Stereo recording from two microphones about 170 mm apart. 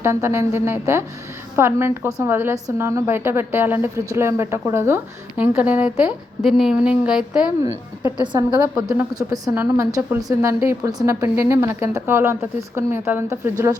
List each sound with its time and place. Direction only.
0.0 s a woman's voice: 15° right (ahead or behind)
8.2 s a woman's voice: 25° right (ahead or behind)
8.4 s a woman's voice: 5° right (ahead or behind)
8.9 s a woman's voice: 20° right (ahead or behind)